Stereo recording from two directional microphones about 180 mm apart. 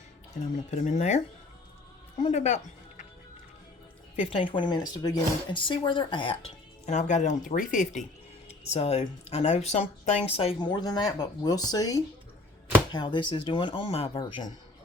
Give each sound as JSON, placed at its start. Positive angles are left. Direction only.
{"t": 0.4, "sound": "speech", "side_deg": 45}
{"t": 2.2, "sound": "speech", "side_deg": 40}
{"t": 4.2, "sound": "speech", "side_deg": 30}